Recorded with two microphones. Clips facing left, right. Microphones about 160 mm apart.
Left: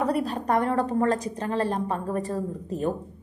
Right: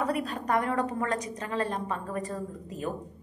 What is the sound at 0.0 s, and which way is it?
A woman's voice, 35° left (ahead or behind).